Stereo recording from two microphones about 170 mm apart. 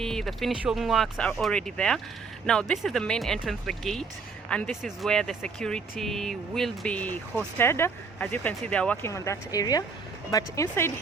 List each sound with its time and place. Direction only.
0.0 s speech: 5° left (ahead or behind)